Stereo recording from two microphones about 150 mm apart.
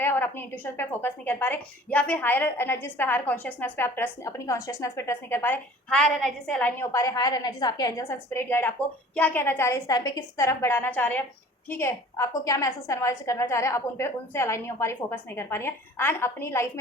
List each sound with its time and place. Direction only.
0.0 s a woman's voice: 15° left (ahead or behind)
5.9 s a woman's voice: 5° left (ahead or behind)